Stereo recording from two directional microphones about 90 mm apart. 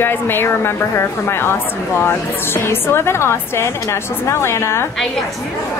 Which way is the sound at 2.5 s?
25° left (ahead or behind).